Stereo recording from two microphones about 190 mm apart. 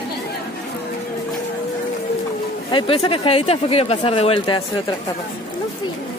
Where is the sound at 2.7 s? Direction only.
30° left (ahead or behind).